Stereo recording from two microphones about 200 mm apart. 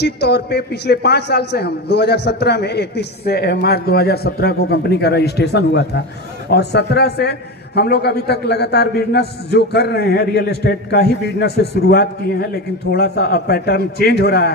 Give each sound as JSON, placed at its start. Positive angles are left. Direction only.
{"t": 0.0, "sound": "a man's voice", "side_deg": 55}